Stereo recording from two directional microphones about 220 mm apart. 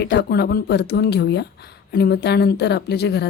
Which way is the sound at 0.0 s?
45° left (ahead or behind).